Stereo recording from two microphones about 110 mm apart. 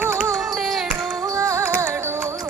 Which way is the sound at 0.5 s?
Centre (ahead or behind).